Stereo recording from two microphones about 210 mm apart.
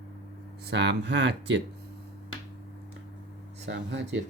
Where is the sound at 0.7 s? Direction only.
55° right (ahead or behind).